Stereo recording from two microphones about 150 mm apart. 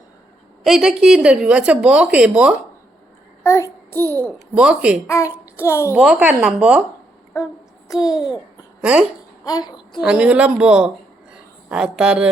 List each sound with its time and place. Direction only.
0.6 s a woman's voice: centre (ahead or behind)
3.4 s child singing: 20° left (ahead or behind)
4.4 s a woman's voice: 5° right (ahead or behind)
5.0 s a child's voice: 20° left (ahead or behind)
6.0 s a woman's voice: 5° right (ahead or behind)
7.9 s speech: 5° right (ahead or behind)
9.4 s speech: 25° left (ahead or behind)
10.0 s a woman's voice: 5° right (ahead or behind)